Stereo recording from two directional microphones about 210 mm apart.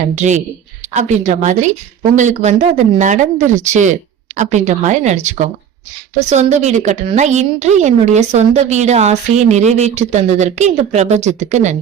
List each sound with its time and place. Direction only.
0.2 s a woman's voice: 35° right (ahead or behind)